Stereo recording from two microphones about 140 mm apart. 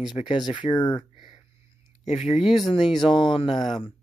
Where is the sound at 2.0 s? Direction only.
50° left (ahead or behind).